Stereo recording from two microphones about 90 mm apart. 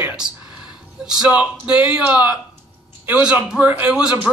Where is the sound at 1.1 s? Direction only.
10° right (ahead or behind).